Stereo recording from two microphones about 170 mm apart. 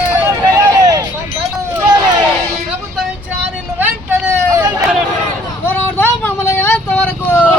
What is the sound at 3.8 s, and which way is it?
Hubbub, 10° right (ahead or behind).